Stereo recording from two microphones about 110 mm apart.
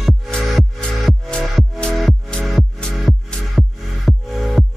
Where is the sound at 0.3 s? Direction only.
5° left (ahead or behind).